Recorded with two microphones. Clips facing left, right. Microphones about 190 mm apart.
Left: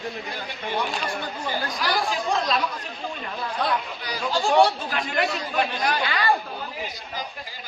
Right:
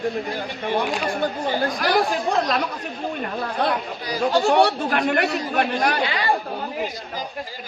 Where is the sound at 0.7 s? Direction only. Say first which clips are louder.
Right 4 dB; 35° right (ahead or behind).